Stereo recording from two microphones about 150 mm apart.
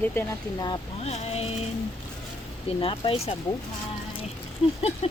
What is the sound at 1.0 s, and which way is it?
Speech, 45° left (ahead or behind).